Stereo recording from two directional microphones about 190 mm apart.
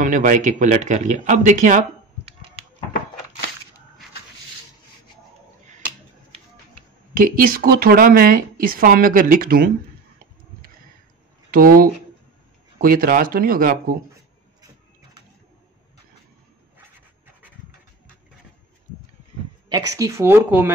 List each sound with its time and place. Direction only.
0.0 s speech: 45° right (ahead or behind)
7.2 s speech: 50° right (ahead or behind)
11.5 s speech: 50° right (ahead or behind)
19.7 s speech: 20° right (ahead or behind)